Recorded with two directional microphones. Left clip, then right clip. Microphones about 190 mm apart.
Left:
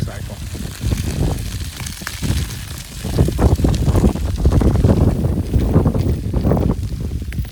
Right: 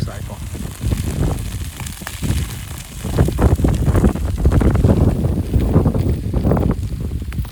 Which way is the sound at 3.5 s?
15° right (ahead or behind).